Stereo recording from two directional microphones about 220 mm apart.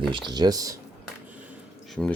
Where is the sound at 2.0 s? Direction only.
Centre (ahead or behind).